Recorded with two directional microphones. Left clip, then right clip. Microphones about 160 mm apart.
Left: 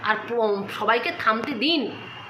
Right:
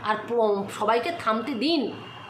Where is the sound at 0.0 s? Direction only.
15° right (ahead or behind).